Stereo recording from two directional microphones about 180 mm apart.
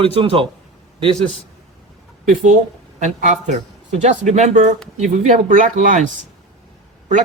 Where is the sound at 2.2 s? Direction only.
45° right (ahead or behind).